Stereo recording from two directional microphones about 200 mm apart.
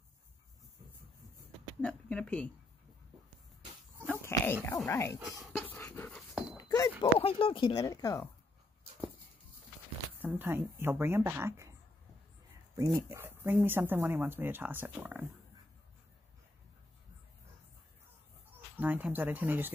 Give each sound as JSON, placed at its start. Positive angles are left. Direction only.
{"t": 1.8, "sound": "speech", "side_deg": 5}
{"t": 4.1, "sound": "pig", "side_deg": 10}
{"t": 4.8, "sound": "speech", "side_deg": 15}
{"t": 5.2, "sound": "dog", "side_deg": 0}
{"t": 5.8, "sound": "dog", "side_deg": 10}
{"t": 6.5, "sound": "a sound", "side_deg": 15}
{"t": 7.0, "sound": "speech", "side_deg": 25}
{"t": 10.1, "sound": "speech", "side_deg": -10}
{"t": 12.7, "sound": "speech", "side_deg": -15}
{"t": 18.8, "sound": "speech", "side_deg": -10}